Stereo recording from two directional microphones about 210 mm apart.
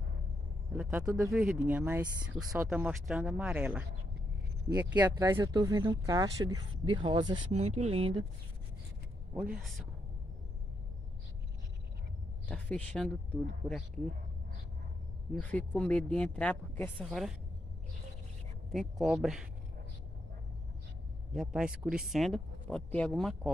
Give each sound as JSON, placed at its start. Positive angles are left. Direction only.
{"t": 0.7, "sound": "speech", "side_deg": -10}
{"t": 1.2, "sound": "speech", "side_deg": -5}
{"t": 4.7, "sound": "speech", "side_deg": -15}
{"t": 9.3, "sound": "speech", "side_deg": -5}
{"t": 12.4, "sound": "speech", "side_deg": 5}
{"t": 15.5, "sound": "speech", "side_deg": 5}
{"t": 18.7, "sound": "speech", "side_deg": 0}
{"t": 21.3, "sound": "speech", "side_deg": -5}